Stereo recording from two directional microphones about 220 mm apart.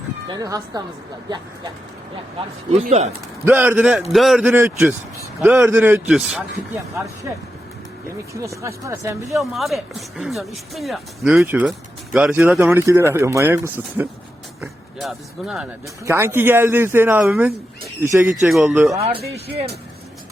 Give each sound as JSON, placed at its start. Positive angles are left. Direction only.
{"t": 0.3, "sound": "speech", "side_deg": -15}
{"t": 2.7, "sound": "speech", "side_deg": -30}
{"t": 3.4, "sound": "speech", "side_deg": -10}
{"t": 8.3, "sound": "speech", "side_deg": -15}
{"t": 9.4, "sound": "speech", "side_deg": 0}
{"t": 18.9, "sound": "speech", "side_deg": -25}
{"t": 19.2, "sound": "speech", "side_deg": -45}